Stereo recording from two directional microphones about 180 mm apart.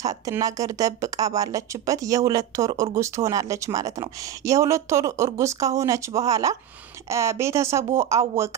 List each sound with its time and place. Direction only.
0.0 s a woman's voice: 20° right (ahead or behind)